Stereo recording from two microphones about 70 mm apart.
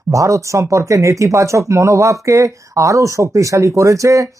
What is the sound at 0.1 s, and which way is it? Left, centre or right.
Speech, right.